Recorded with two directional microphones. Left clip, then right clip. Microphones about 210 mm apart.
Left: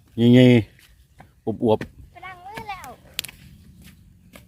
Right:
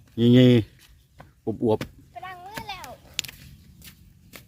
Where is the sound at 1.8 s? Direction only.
55° right (ahead or behind).